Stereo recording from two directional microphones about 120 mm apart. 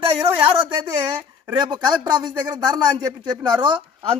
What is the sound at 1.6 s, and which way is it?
Speech, 35° right (ahead or behind).